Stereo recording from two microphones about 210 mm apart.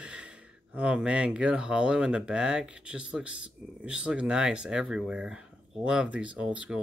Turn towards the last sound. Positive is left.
turn(degrees=-5)  # may be behind; listen again after turning